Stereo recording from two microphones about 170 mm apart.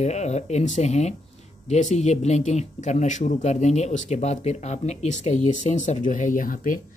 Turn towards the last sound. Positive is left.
turn(degrees=55)  # may be behind; listen again after turning